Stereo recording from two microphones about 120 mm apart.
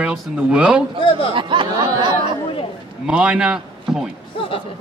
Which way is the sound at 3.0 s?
10° right (ahead or behind).